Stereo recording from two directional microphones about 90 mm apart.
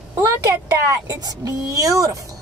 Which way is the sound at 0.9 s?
40° right (ahead or behind).